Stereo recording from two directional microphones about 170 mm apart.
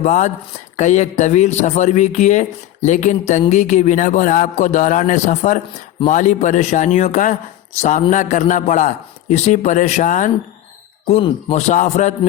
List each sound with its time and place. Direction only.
0.0 s speech: 45° left (ahead or behind)
11.2 s speech: 30° left (ahead or behind)
11.7 s speech: 45° left (ahead or behind)